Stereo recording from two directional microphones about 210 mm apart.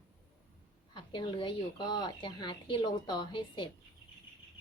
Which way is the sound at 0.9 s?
20° left (ahead or behind).